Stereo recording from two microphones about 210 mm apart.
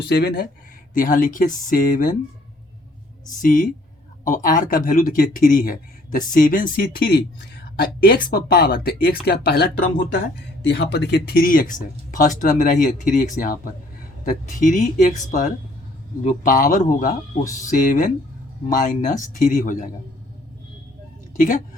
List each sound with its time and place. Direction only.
0.1 s speech: 50° left (ahead or behind)
3.4 s speech: 40° left (ahead or behind)
21.3 s a woman's voice: 40° left (ahead or behind)